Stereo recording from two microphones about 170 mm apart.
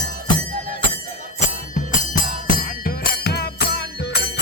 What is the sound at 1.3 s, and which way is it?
Music, 50° left (ahead or behind).